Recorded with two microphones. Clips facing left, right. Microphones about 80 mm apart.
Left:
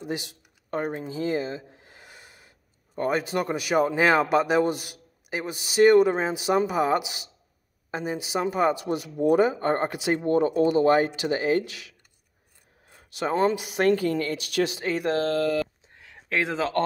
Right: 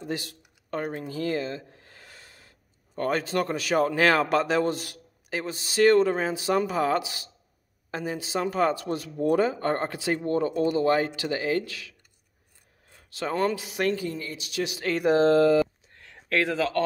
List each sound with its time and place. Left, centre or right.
0.0 s speech: centre
0.7 s snort: left
3.0 s speech: centre
13.1 s speech: left
13.8 s speech: left
15.1 s speech: right
15.9 s a sound: centre
16.3 s speech: left